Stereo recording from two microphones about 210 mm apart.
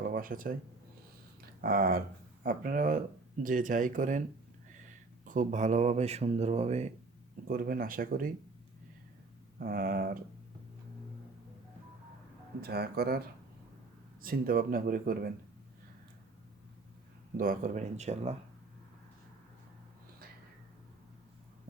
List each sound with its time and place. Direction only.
0.0 s speech: 40° right (ahead or behind)
1.6 s speech: 45° right (ahead or behind)
5.2 s speech: 35° right (ahead or behind)
7.4 s speech: 45° right (ahead or behind)
9.6 s speech: 45° right (ahead or behind)
12.6 s speech: 50° right (ahead or behind)
17.3 s speech: 40° right (ahead or behind)